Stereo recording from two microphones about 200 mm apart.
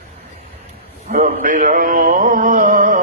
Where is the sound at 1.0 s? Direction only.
40° right (ahead or behind).